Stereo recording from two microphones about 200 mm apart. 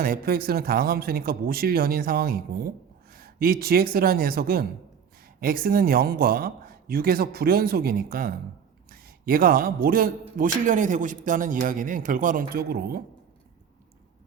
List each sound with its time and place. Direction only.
0.0 s speech: 50° right (ahead or behind)